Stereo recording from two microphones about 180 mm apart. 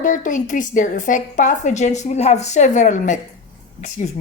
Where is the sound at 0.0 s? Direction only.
45° left (ahead or behind).